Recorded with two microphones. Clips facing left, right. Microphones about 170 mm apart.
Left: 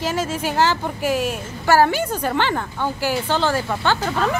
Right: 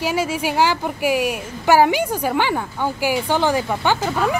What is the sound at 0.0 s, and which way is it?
Speech, 10° right (ahead or behind).